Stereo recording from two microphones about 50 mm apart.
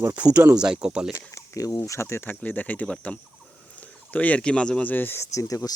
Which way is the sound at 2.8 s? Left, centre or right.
Left.